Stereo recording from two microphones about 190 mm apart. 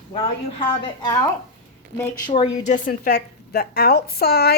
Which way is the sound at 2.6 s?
45° left (ahead or behind).